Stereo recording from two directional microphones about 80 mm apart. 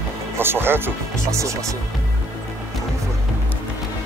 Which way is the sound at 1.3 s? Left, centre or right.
Right.